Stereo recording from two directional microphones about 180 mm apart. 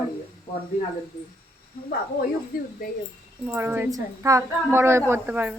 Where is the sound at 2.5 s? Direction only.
55° left (ahead or behind).